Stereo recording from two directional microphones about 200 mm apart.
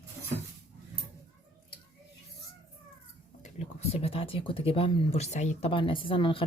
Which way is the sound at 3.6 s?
30° left (ahead or behind).